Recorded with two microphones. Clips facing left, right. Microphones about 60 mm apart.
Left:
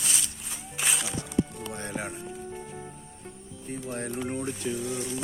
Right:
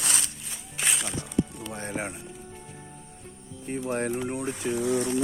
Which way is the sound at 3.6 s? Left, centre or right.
Right.